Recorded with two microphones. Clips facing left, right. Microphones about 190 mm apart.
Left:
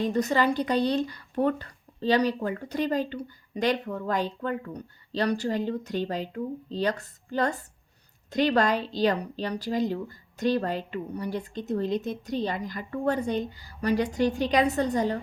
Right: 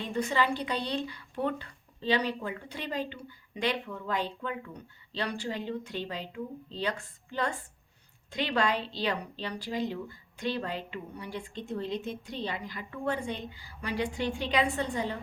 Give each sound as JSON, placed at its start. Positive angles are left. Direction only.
{"t": 0.0, "sound": "speech", "side_deg": 40}